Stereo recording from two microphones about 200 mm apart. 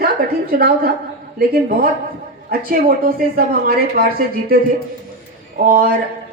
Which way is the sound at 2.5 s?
45° right (ahead or behind).